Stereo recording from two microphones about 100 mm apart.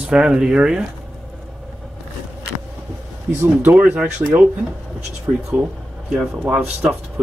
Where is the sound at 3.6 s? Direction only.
15° right (ahead or behind).